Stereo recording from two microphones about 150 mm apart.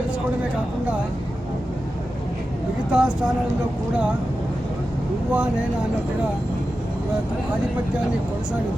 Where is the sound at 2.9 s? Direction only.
5° right (ahead or behind).